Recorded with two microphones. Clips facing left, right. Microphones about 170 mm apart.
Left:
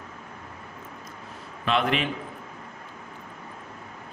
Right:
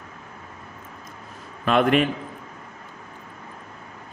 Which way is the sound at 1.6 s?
50° right (ahead or behind).